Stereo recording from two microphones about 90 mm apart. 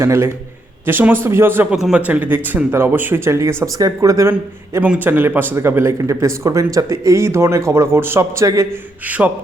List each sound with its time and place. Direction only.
0.0 s speech: 35° right (ahead or behind)
1.7 s speech: 15° right (ahead or behind); by 4.8 s 35° right (ahead or behind)
4.8 s speech: 20° right (ahead or behind); by 8.8 s 35° right (ahead or behind)
9.0 s speech: 20° right (ahead or behind)